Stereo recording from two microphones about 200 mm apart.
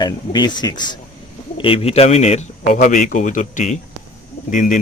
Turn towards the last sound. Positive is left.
turn(degrees=40)  # may be behind; listen again after turning